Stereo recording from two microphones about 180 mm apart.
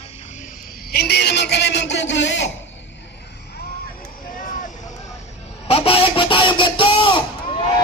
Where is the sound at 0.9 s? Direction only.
65° left (ahead or behind); by 2.5 s 80° left.